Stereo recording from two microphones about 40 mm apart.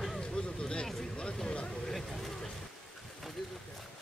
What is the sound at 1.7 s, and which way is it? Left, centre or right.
Vehicle, centre.